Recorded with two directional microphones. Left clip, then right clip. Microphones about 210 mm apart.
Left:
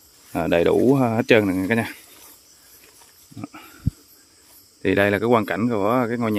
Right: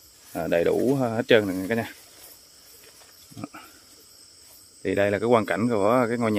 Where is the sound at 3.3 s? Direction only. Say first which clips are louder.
Left 2 dB; 15° left (ahead or behind).